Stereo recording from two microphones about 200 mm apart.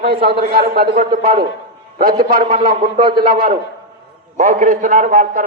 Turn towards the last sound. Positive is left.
turn(degrees=-40)  # may be behind; listen again after turning